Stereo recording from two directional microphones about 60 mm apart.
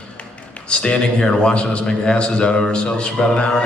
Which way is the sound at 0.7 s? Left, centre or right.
Centre.